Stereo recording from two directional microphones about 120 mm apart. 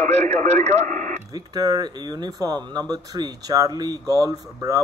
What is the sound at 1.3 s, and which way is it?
Speech, 30° right (ahead or behind).